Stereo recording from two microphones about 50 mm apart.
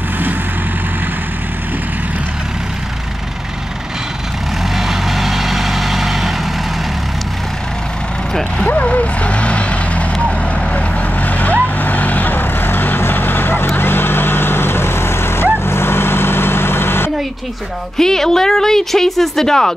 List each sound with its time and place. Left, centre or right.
4.7 s vehicle: centre
8.8 s vehicle: left
17.9 s a woman's voice: centre